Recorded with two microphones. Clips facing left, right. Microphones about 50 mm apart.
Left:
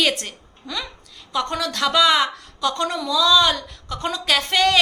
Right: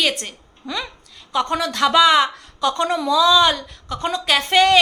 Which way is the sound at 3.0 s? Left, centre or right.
Right.